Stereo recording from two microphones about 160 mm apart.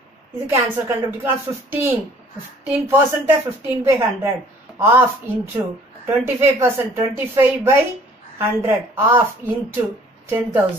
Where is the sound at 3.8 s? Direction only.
20° right (ahead or behind).